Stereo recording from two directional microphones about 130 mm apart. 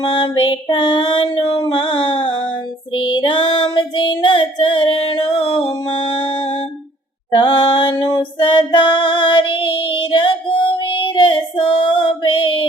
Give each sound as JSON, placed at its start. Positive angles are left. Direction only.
{"t": 0.0, "sound": "female singing", "side_deg": 45}